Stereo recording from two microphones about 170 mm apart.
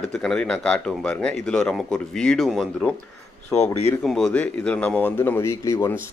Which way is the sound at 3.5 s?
40° left (ahead or behind).